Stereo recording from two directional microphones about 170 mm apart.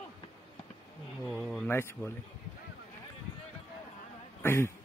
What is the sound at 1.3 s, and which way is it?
Speech, centre (ahead or behind).